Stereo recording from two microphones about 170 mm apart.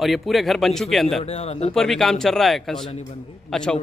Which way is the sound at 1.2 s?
40° left (ahead or behind).